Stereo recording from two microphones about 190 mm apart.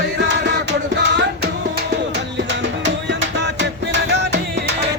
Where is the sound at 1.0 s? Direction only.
65° right (ahead or behind).